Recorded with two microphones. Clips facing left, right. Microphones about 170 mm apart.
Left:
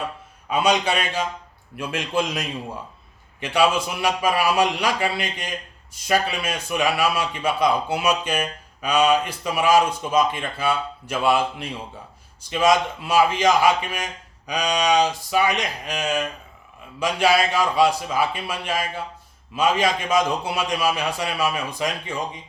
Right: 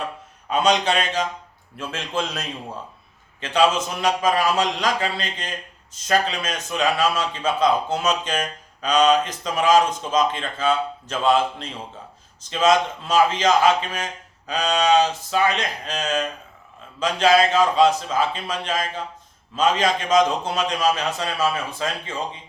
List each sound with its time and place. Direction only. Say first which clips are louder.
0.5 s a man's voice: right 1 dB; 10° left (ahead or behind)